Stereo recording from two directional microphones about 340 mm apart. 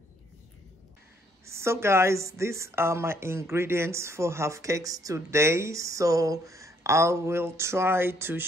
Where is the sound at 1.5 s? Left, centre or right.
Centre.